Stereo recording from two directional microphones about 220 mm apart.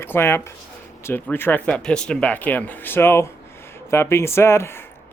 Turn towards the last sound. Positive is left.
turn(degrees=10)  # may be behind; listen again after turning